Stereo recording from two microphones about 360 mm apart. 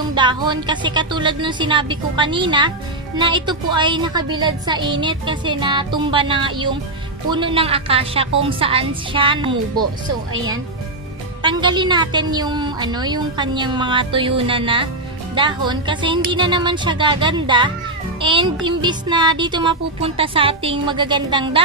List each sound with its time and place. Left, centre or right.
0.1 s speech: centre
11.4 s speech: centre